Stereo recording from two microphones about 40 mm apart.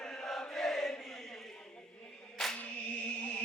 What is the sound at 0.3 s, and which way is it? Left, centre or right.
Chant, centre.